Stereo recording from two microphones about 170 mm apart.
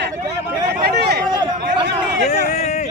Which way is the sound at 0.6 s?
70° right (ahead or behind).